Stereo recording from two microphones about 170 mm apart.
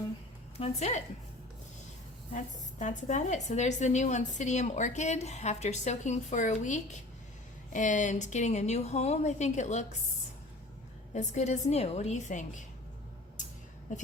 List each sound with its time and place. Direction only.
0.6 s a woman's voice: 40° left (ahead or behind)
2.3 s a woman's voice: 45° left (ahead or behind)
11.1 s a woman's voice: 45° left (ahead or behind)
13.9 s a woman's voice: 45° left (ahead or behind)